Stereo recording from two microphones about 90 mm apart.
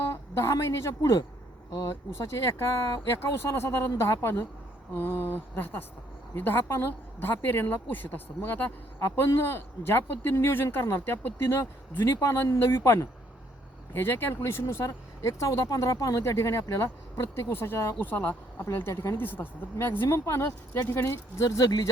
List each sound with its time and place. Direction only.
0.1 s a woman's voice: 30° left (ahead or behind)